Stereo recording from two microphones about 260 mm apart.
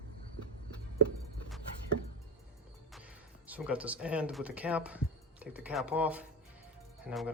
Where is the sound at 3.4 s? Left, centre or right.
Centre.